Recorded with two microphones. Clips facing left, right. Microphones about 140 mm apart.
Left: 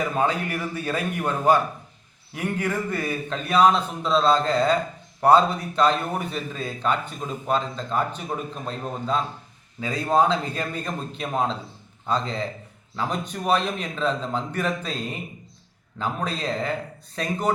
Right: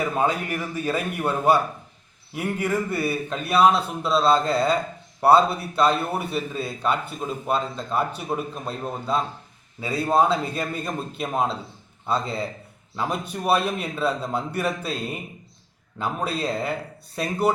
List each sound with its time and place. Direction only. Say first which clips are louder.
0.1 s a man's voice: even; 10° right (ahead or behind)